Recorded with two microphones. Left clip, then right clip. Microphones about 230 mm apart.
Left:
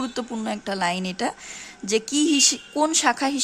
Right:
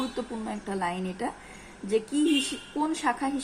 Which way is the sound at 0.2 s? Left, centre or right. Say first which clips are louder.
Left 5 dB; left.